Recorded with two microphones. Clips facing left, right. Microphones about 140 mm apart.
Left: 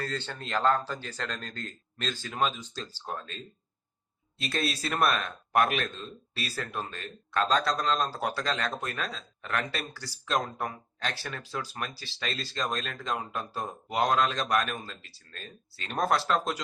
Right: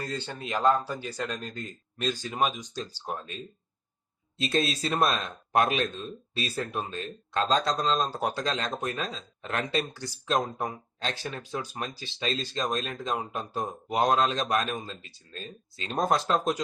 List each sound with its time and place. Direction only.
0.0 s speech: 15° right (ahead or behind)